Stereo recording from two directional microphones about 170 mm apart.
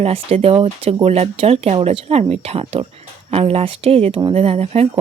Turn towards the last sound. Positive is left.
turn(degrees=-35)  # may be behind; listen again after turning